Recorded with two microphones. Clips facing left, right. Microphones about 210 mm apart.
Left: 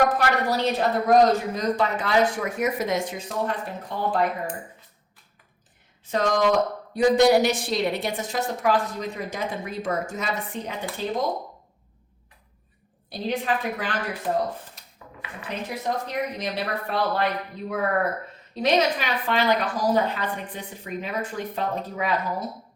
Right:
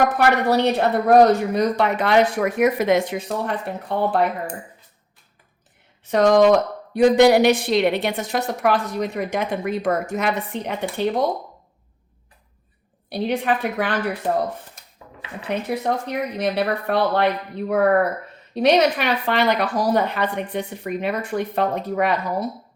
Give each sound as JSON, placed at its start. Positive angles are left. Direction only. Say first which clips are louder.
{"t": 0.2, "sound": "speech", "louder": "right 6 dB", "side_deg": -60}
{"t": 6.1, "sound": "speech", "louder": "right 8 dB", "side_deg": -65}
{"t": 13.1, "sound": "speech", "louder": "right 5 dB", "side_deg": -65}
{"t": 15.4, "sound": "speech", "louder": "right 7 dB", "side_deg": -60}